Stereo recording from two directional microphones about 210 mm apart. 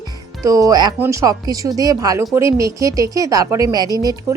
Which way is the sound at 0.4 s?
15° right (ahead or behind).